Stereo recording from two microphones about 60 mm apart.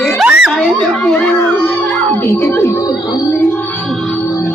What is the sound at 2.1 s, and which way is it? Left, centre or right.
Music, left.